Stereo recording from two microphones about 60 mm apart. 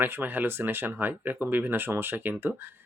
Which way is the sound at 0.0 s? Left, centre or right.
Right.